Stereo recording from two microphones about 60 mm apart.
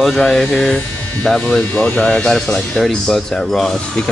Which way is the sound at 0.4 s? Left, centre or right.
Centre.